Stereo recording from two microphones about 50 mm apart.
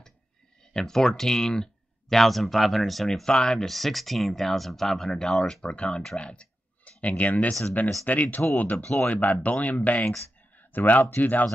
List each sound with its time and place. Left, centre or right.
0.7 s speech: centre; by 11.4 s left